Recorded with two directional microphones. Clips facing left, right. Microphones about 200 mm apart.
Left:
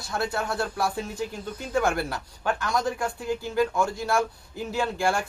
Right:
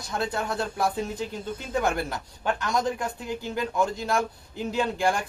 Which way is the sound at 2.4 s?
20° right (ahead or behind).